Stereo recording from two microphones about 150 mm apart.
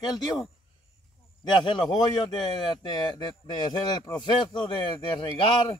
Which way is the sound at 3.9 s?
30° left (ahead or behind).